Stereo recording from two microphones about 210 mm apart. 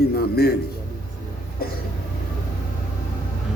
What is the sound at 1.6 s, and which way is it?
Music, 45° left (ahead or behind).